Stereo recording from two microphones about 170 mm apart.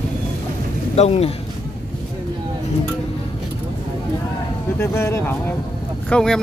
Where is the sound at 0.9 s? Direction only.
40° left (ahead or behind).